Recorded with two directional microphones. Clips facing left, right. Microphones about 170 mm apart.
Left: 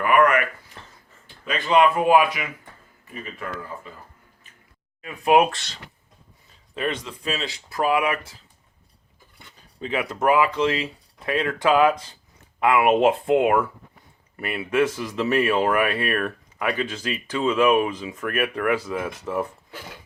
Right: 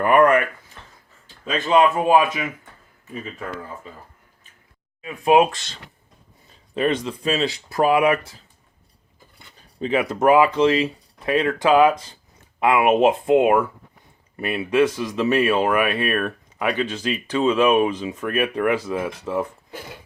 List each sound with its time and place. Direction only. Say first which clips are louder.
0.0 s a sound: right 3 dB; 35° right (ahead or behind)
1.6 s speech: right 1 dB; 25° right (ahead or behind)
5.0 s speech: right 2 dB; 25° right (ahead or behind)
6.7 s speech: right 6 dB; 25° right (ahead or behind)
9.8 s speech: right 4 dB; 25° right (ahead or behind)